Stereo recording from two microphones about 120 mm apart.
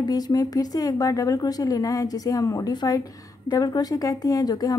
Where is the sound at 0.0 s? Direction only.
35° left (ahead or behind).